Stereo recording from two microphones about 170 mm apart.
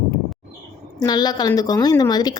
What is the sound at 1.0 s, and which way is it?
A woman's voice, 25° left (ahead or behind).